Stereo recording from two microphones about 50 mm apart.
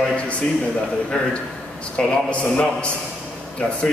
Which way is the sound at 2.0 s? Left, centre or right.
Centre.